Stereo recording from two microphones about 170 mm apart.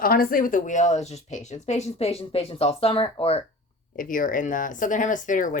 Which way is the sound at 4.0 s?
55° left (ahead or behind).